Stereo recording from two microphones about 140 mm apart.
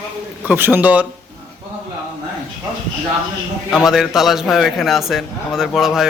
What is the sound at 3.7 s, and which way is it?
A man's voice, centre (ahead or behind).